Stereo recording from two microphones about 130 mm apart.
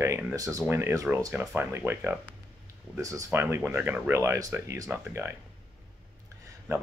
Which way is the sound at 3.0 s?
25° right (ahead or behind).